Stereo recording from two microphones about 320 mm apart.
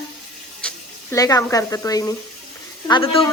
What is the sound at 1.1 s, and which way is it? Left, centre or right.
Speech, centre.